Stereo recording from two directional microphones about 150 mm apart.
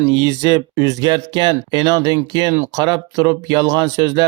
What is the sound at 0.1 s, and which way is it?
Speech, 25° right (ahead or behind).